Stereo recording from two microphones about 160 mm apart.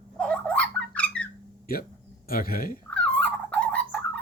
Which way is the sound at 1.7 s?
70° left (ahead or behind).